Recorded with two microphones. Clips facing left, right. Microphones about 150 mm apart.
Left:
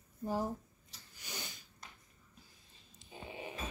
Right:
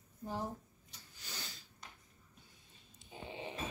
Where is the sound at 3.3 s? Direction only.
20° right (ahead or behind).